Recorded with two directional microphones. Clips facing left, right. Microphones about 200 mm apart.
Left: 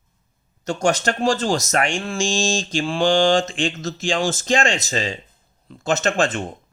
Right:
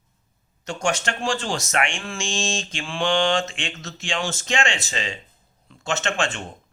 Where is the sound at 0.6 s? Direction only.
40° left (ahead or behind).